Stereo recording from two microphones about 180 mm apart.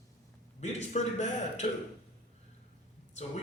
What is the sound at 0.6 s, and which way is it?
A man's voice, 40° left (ahead or behind).